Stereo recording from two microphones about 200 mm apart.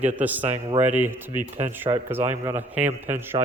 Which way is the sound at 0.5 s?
35° right (ahead or behind).